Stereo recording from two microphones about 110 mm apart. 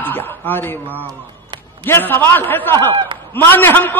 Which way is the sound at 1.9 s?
20° left (ahead or behind).